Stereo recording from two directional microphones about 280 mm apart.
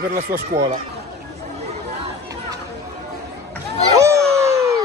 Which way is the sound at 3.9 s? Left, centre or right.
Centre.